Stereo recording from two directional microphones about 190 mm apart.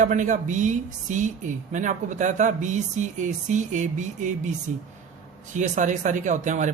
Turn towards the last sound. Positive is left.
turn(degrees=-40)  # may be behind; listen again after turning